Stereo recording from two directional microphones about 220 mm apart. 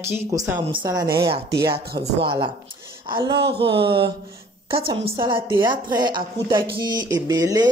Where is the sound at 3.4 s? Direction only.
50° right (ahead or behind).